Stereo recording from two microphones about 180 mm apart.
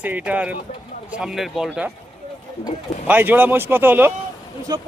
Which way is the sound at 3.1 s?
10° right (ahead or behind).